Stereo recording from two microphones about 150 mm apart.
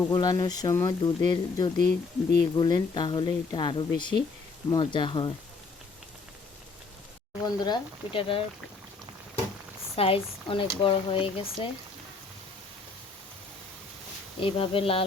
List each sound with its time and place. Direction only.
0.1 s speech: 25° left (ahead or behind)
1.8 s speech: 90° left
2.6 s speech: 30° left (ahead or behind)
7.4 s speech: 30° left (ahead or behind)
9.9 s speech: 40° left (ahead or behind)
14.4 s speech: 35° left (ahead or behind)